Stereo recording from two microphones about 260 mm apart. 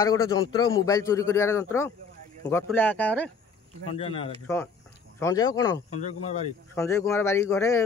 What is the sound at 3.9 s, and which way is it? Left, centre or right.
Speech, left.